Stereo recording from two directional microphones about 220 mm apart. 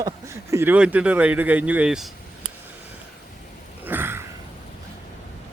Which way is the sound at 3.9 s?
10° right (ahead or behind).